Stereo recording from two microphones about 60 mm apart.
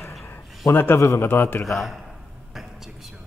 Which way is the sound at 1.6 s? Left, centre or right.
Centre.